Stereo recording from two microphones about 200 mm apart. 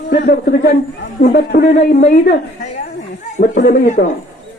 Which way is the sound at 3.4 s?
45° left (ahead or behind).